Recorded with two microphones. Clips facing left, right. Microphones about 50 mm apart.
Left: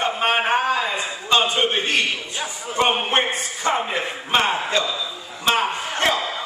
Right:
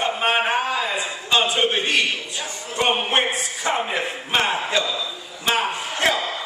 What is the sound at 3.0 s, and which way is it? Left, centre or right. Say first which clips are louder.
Speech: even; centre.